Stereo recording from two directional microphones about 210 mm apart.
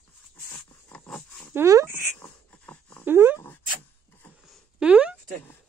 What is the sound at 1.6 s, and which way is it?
Speech, 15° right (ahead or behind).